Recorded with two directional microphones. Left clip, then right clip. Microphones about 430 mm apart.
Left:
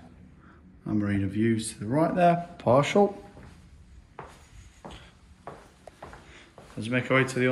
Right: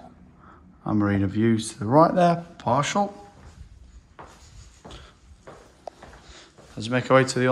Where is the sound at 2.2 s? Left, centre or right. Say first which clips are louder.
Right 2 dB; centre.